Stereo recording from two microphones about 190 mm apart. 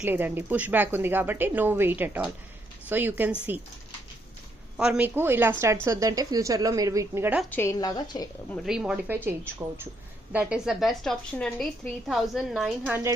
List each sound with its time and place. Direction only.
0.0 s a woman's voice: 10° right (ahead or behind)
4.8 s a woman's voice: 5° right (ahead or behind)
7.5 s speech: 15° left (ahead or behind)
8.6 s a woman's voice: 5° right (ahead or behind)